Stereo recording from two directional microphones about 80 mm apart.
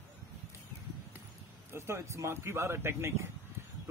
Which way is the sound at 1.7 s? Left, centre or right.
Right.